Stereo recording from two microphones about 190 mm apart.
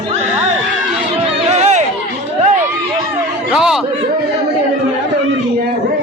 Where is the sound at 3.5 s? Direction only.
5° right (ahead or behind).